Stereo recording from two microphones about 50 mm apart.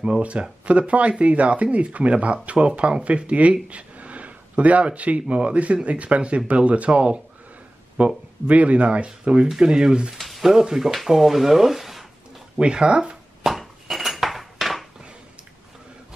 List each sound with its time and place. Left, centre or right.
0.0 s speech: right
10.1 s a sound: centre
10.6 s speech: centre
12.5 s speech: centre
13.4 s dishes: centre